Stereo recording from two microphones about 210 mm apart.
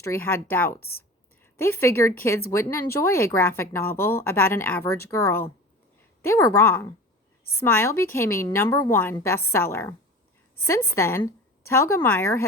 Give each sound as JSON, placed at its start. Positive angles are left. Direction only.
{"t": 0.0, "sound": "speech", "side_deg": 10}